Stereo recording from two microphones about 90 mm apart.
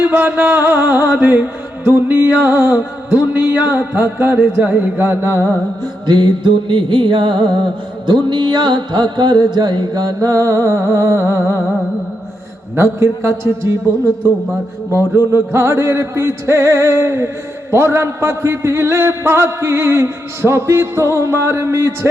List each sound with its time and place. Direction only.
0.0 s music: 20° right (ahead or behind)
5.8 s music: 55° right (ahead or behind)
8.0 s mantra: 55° right (ahead or behind); by 11.6 s 30° right (ahead or behind)
12.7 s music: 30° right (ahead or behind)
15.3 s music: 30° right (ahead or behind)